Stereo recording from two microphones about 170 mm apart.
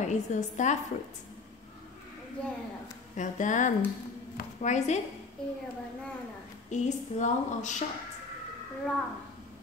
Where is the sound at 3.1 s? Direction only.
45° left (ahead or behind).